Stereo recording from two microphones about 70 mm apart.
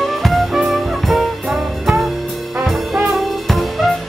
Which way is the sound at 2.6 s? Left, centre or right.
Centre.